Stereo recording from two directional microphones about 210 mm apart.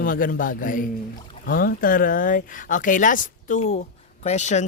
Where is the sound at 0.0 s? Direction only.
40° left (ahead or behind).